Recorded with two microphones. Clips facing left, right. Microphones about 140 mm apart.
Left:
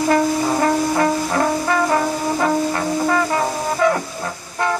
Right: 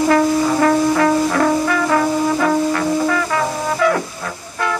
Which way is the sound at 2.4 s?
30° left (ahead or behind).